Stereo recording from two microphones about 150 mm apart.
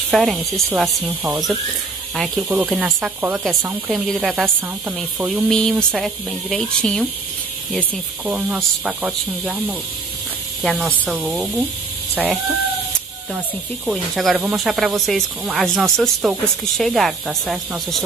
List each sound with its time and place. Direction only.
0.1 s speech: centre (ahead or behind)
5.5 s speech: 5° left (ahead or behind); by 12.5 s 10° right (ahead or behind)
13.8 s speech: 5° right (ahead or behind)